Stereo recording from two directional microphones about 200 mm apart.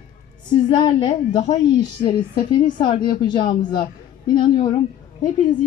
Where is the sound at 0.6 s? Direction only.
25° left (ahead or behind).